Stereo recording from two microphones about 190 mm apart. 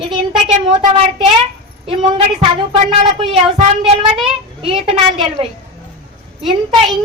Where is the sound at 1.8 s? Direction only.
30° right (ahead or behind).